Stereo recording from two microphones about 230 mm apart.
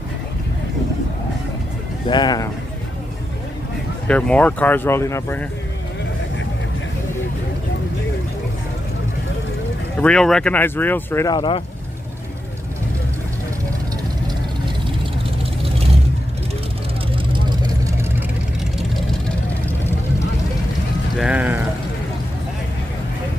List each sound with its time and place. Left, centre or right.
2.0 s speech: centre
4.1 s speech: centre
9.9 s speech: centre; by 11.6 s left
17.1 s vehicle: centre
21.2 s pour: centre